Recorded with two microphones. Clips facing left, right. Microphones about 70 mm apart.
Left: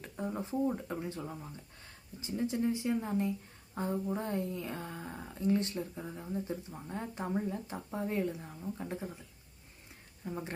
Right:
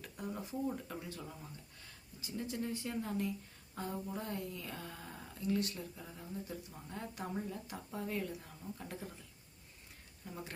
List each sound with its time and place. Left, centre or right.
0.0 s speech: left
10.2 s speech: left